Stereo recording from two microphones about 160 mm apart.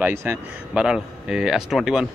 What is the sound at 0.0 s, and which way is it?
Speech, 15° right (ahead or behind).